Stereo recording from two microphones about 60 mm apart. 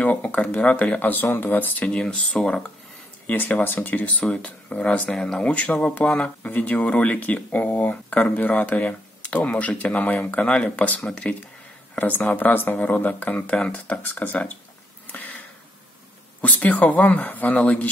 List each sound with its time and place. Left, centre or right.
0.2 s speech: left
1.9 s speech: centre
3.3 s speech: left; by 11.3 s centre
11.9 s speech: left
13.3 s speech: centre
15.1 s a sound: left
16.3 s speech: left